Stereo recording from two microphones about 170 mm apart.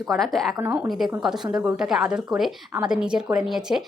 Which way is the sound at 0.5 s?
10° right (ahead or behind).